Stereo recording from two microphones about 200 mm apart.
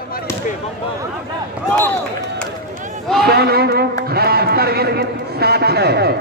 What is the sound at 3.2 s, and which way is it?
A man's voice, 50° right (ahead or behind).